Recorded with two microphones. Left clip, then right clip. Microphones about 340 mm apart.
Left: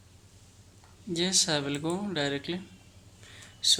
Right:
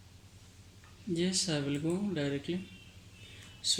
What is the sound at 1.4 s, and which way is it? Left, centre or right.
Speech, left.